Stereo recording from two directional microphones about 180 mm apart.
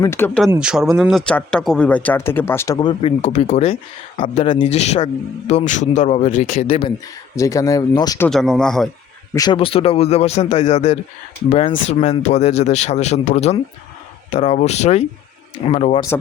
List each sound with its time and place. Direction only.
0.0 s a man's voice: 15° left (ahead or behind)
0.6 s a man's voice: 5° right (ahead or behind); by 6.9 s 35° left (ahead or behind)
7.3 s speech: 20° left (ahead or behind)
8.3 s speech: centre (ahead or behind)
9.3 s speech: 25° left (ahead or behind)